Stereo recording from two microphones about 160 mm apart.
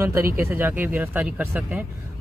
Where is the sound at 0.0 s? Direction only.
15° right (ahead or behind).